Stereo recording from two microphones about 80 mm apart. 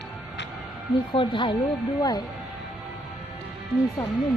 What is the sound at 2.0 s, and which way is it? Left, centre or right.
Speech, left.